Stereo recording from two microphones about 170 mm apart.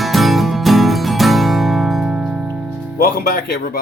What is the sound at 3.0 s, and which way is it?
Speech, 60° left (ahead or behind).